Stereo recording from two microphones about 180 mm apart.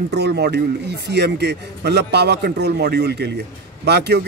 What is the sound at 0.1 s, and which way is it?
A man's voice, 65° right (ahead or behind).